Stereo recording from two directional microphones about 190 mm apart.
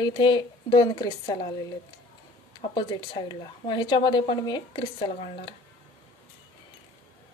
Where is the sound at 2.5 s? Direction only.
25° left (ahead or behind).